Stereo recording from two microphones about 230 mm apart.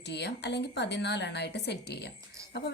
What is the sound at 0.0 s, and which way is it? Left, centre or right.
A woman's voice, left.